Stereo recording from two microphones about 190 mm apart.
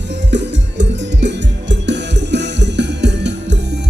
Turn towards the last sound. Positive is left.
turn(degrees=-65)  # may be behind; listen again after turning